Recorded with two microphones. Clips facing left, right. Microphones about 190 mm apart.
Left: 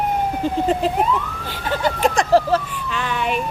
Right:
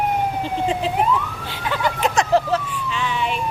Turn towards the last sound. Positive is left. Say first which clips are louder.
# left 1 dB
turn(degrees=55)  # may be behind; listen again after turning